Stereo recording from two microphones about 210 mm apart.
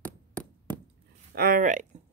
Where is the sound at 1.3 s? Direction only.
45° right (ahead or behind).